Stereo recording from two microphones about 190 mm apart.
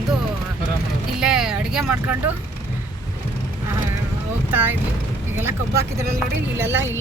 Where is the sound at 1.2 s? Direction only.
5° right (ahead or behind).